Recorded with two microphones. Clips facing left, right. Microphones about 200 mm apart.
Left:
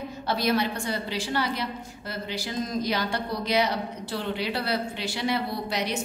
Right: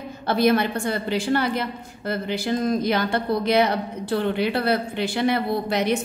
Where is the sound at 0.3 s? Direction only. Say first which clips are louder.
Right 6 dB; 55° right (ahead or behind).